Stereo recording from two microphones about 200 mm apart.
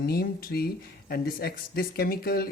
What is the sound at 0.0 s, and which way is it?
Speech, 50° left (ahead or behind).